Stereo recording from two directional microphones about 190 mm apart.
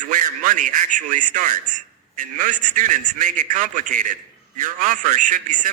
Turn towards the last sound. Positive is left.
turn(degrees=-45)  # may be behind; listen again after turning